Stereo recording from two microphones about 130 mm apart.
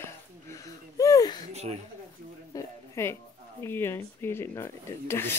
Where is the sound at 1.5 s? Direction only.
55° right (ahead or behind).